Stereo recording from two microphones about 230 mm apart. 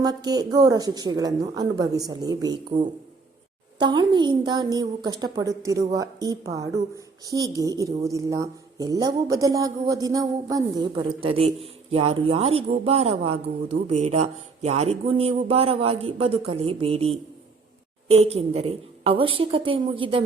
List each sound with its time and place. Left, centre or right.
0.0 s a woman's voice: centre